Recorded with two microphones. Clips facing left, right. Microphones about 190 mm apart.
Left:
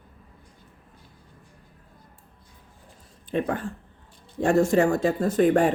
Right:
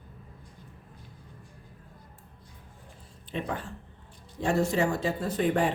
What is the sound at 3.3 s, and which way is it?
Speech, 50° left (ahead or behind).